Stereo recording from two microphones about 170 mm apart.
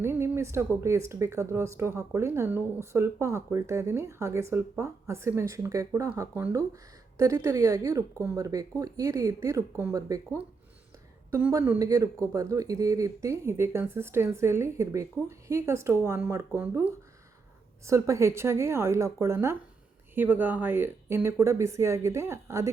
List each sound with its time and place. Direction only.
0.0 s speech: 15° right (ahead or behind)
11.3 s speech: 15° right (ahead or behind)